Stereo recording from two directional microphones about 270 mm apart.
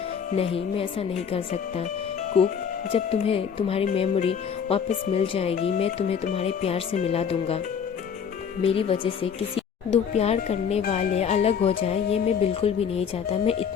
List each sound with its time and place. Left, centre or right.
0.3 s speech: left
8.6 s speech: left